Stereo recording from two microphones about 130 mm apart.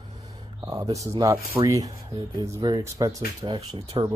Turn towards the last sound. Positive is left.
turn(degrees=-35)  # may be behind; listen again after turning